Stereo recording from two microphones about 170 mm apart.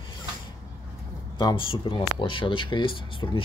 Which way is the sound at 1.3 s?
25° left (ahead or behind).